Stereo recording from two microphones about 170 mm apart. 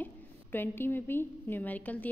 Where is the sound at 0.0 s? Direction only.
10° left (ahead or behind).